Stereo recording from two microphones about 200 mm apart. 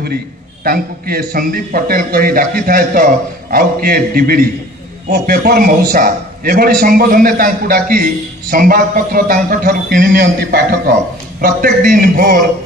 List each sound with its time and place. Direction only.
0.7 s a man's voice: 50° right (ahead or behind)